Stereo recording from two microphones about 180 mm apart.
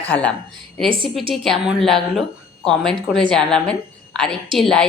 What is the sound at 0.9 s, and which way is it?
Speech, 30° right (ahead or behind).